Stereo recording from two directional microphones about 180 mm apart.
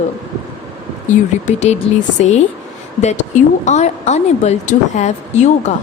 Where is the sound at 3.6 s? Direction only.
40° left (ahead or behind).